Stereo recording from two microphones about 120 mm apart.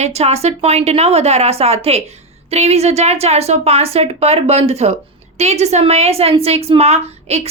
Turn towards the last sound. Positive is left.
turn(degrees=-65)  # may be behind; listen again after turning